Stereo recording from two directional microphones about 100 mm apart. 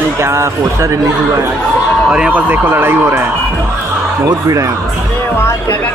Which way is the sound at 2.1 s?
15° right (ahead or behind).